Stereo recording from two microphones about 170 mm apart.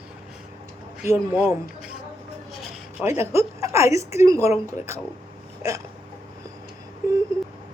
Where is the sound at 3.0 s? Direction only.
15° right (ahead or behind).